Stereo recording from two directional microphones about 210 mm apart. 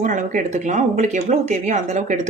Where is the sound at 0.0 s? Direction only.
35° right (ahead or behind).